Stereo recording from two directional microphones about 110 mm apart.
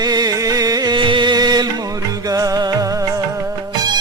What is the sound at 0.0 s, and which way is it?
Music, 35° right (ahead or behind).